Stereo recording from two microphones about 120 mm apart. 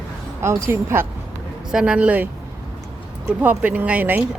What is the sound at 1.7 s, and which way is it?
Speech, 10° right (ahead or behind).